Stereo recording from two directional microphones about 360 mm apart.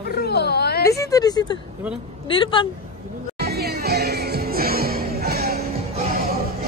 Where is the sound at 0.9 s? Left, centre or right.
Centre.